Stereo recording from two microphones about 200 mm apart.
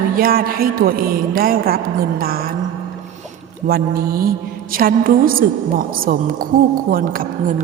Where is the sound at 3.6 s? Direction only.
50° right (ahead or behind).